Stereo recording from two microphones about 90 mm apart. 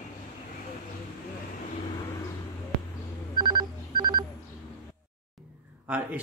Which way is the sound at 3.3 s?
55° right (ahead or behind).